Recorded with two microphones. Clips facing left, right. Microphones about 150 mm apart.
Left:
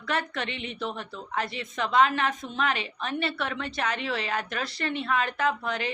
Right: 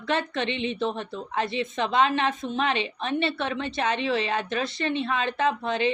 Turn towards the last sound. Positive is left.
turn(degrees=-25)  # may be behind; listen again after turning